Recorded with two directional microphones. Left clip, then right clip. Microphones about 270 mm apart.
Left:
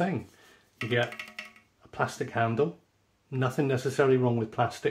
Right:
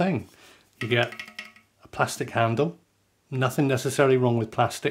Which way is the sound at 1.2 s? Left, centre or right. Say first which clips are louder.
Right 2 dB; centre.